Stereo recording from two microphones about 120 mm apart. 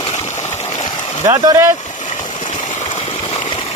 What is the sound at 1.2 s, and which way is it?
Speech, 30° right (ahead or behind).